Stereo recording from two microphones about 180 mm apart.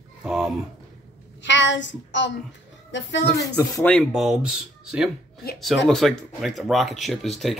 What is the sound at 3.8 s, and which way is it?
Speech, 5° left (ahead or behind).